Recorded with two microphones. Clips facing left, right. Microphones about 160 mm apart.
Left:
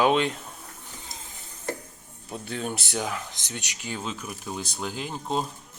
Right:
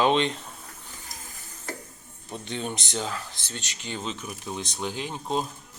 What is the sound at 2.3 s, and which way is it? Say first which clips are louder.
Speech: left 1 dB; 5° left (ahead or behind).